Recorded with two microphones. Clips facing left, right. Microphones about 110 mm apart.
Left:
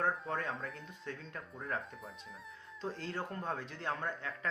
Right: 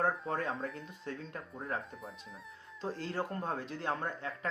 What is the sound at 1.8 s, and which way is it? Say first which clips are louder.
Speech: right 2 dB; centre (ahead or behind).